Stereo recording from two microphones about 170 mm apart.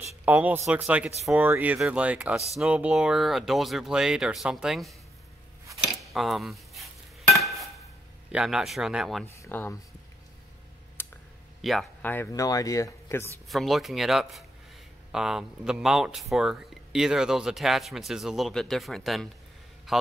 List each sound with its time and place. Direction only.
0.2 s speech: 10° right (ahead or behind)
6.1 s speech: centre (ahead or behind)
7.3 s a sound: centre (ahead or behind)
8.3 s speech: 5° right (ahead or behind)
9.2 s speech: 10° left (ahead or behind)
11.0 s a sound: 15° left (ahead or behind)
11.6 s speech: centre (ahead or behind)
12.1 s speech: 15° left (ahead or behind)
13.5 s a man's voice: centre (ahead or behind)